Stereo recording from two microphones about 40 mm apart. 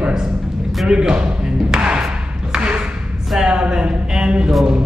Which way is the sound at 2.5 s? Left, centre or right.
Right.